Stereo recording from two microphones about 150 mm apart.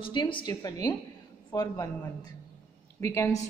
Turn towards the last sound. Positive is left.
turn(degrees=20)  # may be behind; listen again after turning